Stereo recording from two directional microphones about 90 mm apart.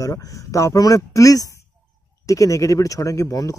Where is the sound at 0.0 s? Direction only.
40° left (ahead or behind).